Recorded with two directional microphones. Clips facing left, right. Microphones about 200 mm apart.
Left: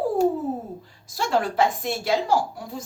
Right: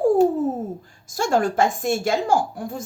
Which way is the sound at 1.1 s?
45° right (ahead or behind).